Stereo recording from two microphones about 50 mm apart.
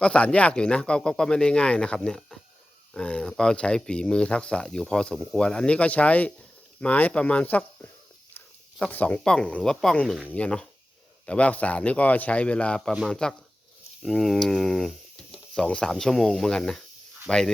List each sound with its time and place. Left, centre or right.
0.0 s speech: left
8.9 s speech: left
9.2 s speech: centre
14.0 s speech: centre
15.6 s speech: centre